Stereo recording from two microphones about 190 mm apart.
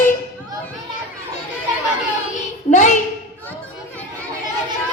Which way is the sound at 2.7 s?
40° left (ahead or behind).